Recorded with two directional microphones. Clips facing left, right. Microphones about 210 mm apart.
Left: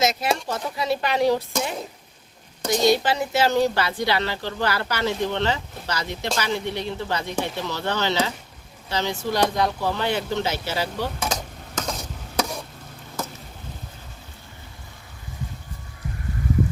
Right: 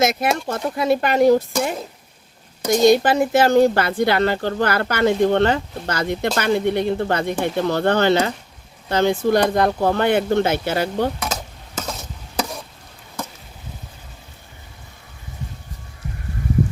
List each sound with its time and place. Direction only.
0.0 s speech: 55° right (ahead or behind)
2.8 s speech: 50° right (ahead or behind)
11.2 s stir: 5° right (ahead or behind)